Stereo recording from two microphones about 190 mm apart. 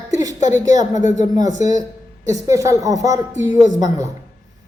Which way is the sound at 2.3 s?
15° right (ahead or behind).